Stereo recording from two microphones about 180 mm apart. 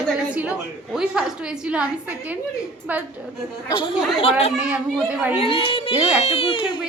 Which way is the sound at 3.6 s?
25° left (ahead or behind).